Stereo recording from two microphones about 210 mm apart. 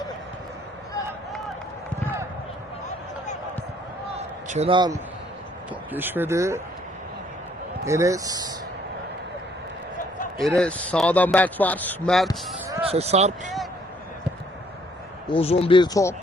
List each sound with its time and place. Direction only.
4.2 s a sound: 30° right (ahead or behind)
5.9 s speech: 10° right (ahead or behind)
7.9 s speech: 15° right (ahead or behind)
10.6 s speech: 5° left (ahead or behind)
12.8 s speech: 30° right (ahead or behind)
15.3 s speech: 25° left (ahead or behind)